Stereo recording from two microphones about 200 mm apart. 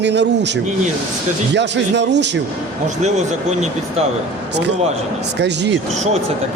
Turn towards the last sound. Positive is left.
turn(degrees=-60)  # may be behind; listen again after turning